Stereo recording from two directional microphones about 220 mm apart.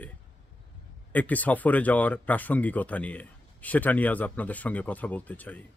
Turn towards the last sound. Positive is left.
turn(degrees=5)  # may be behind; listen again after turning